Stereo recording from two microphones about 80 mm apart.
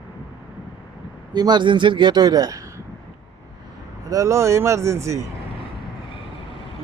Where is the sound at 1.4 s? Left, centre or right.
Right.